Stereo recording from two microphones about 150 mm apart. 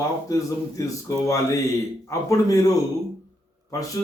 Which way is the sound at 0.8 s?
20° left (ahead or behind).